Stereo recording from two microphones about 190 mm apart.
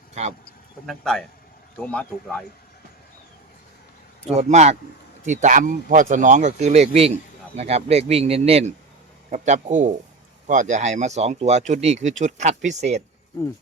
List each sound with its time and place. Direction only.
0.1 s speech: 35° right (ahead or behind)
0.9 s speech: centre (ahead or behind)
4.3 s speech: 35° right (ahead or behind)